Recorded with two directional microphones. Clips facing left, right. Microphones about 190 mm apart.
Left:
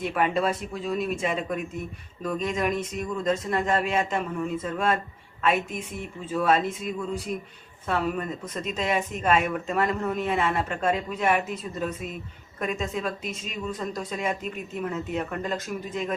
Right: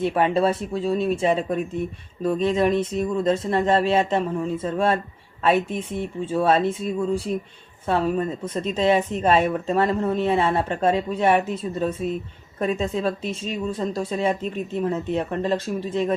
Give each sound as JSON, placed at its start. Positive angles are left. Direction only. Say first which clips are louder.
{"t": 0.0, "sound": "speech", "louder": "right 5 dB", "side_deg": -30}